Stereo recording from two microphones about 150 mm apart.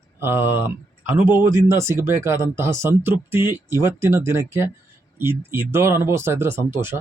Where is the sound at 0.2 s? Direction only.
15° right (ahead or behind).